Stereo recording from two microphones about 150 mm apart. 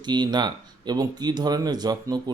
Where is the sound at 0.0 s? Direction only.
30° right (ahead or behind).